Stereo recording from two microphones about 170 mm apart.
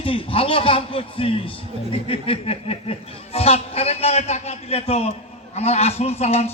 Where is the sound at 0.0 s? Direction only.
30° left (ahead or behind).